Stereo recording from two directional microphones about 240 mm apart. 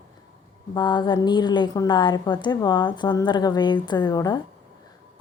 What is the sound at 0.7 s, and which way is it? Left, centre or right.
A woman's voice, centre.